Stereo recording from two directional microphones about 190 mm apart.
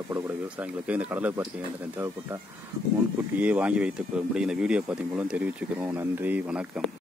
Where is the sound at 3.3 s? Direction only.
5° right (ahead or behind).